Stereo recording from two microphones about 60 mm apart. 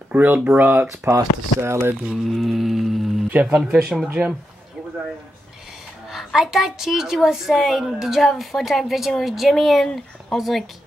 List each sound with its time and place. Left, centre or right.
0.1 s speech: right
0.8 s speech: right
2.0 s a woman's voice: centre
3.3 s speech: right
3.5 s speech: centre
6.0 s a woman's voice: centre